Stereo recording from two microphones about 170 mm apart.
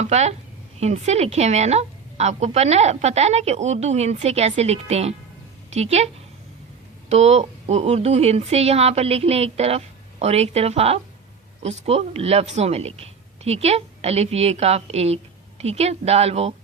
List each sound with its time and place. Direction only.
0.0 s speech: 40° right (ahead or behind)
7.1 s speech: 40° right (ahead or behind)